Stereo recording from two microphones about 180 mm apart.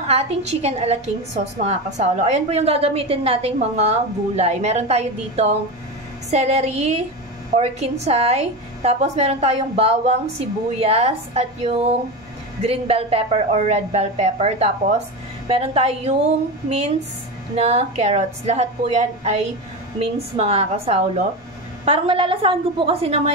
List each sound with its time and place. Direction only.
0.0 s a woman's voice: 35° right (ahead or behind)